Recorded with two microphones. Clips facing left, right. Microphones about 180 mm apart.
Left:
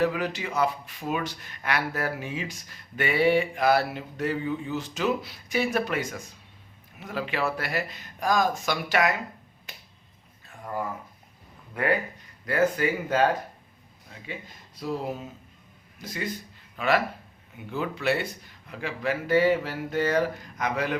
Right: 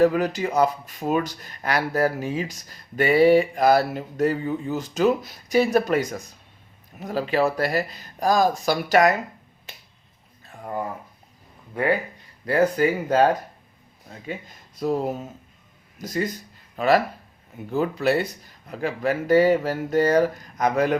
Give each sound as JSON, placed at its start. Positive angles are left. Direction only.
{"t": 0.0, "sound": "speech", "side_deg": -40}
{"t": 11.7, "sound": "speech", "side_deg": -25}
{"t": 14.8, "sound": "speech", "side_deg": -45}